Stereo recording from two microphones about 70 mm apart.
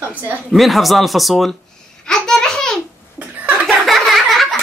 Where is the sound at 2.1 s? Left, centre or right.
Centre.